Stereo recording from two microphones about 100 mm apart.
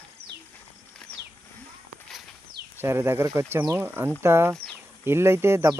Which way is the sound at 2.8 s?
25° right (ahead or behind).